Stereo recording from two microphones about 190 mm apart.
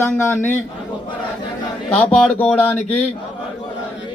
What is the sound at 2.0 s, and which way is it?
Speech, 10° left (ahead or behind).